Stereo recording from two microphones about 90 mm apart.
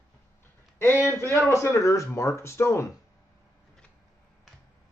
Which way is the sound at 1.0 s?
25° left (ahead or behind).